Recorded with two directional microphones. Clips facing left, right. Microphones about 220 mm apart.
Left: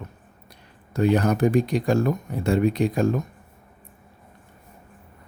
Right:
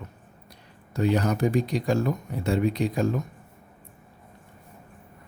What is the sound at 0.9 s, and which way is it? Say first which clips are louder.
Speech: left 4 dB; 55° left (ahead or behind).